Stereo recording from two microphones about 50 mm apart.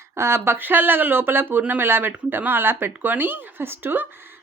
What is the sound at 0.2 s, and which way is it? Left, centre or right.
Speech, right.